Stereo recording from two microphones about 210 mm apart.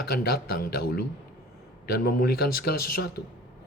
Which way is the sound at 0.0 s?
45° left (ahead or behind).